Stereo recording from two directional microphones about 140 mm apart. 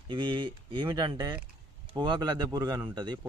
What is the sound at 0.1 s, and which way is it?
A man's voice, 35° right (ahead or behind).